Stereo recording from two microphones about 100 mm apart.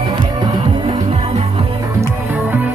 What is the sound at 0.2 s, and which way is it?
Music, 50° right (ahead or behind).